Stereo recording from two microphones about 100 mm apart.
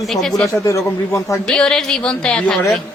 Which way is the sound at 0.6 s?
30° left (ahead or behind).